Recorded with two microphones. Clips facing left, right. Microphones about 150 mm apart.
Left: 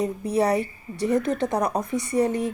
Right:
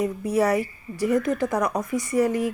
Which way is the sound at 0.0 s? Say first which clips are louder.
Right 1 dB; 30° left (ahead or behind).